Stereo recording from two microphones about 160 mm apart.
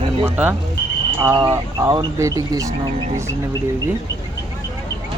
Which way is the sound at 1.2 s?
20° right (ahead or behind).